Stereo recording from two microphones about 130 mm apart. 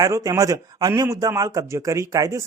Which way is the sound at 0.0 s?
25° right (ahead or behind).